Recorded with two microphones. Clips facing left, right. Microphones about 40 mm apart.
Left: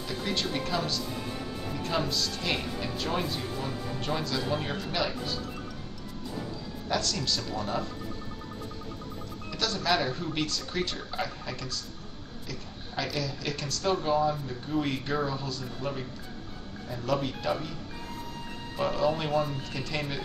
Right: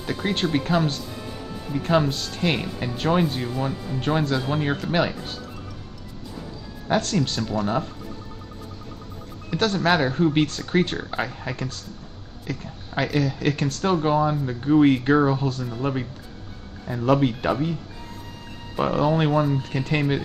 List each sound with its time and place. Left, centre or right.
0.0 s speech: right
6.9 s speech: right
9.5 s speech: right
18.8 s speech: right